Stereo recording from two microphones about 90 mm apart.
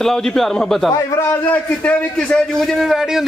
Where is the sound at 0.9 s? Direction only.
35° left (ahead or behind).